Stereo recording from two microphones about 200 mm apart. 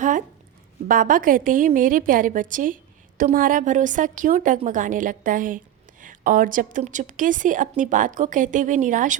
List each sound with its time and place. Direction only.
0.9 s a woman's voice: 45° right (ahead or behind)